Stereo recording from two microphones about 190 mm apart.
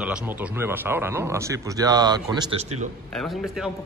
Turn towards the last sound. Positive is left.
turn(degrees=0)  # may be behind; listen again after turning